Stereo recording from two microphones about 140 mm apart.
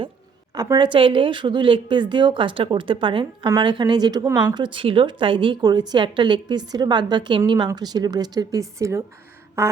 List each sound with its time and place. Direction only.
0.5 s a woman's voice: 30° right (ahead or behind)